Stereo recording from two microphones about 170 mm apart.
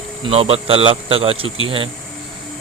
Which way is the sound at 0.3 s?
35° right (ahead or behind).